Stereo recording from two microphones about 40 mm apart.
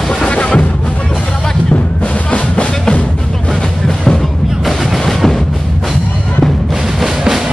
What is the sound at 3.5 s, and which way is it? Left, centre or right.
Music, centre.